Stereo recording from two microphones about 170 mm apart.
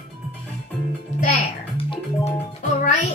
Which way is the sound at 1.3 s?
35° left (ahead or behind).